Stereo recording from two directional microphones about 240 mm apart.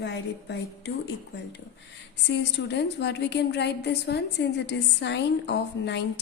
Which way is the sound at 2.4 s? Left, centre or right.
Left.